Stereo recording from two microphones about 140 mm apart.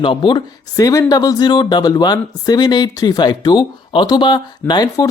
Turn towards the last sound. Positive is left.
turn(degrees=30)  # may be behind; listen again after turning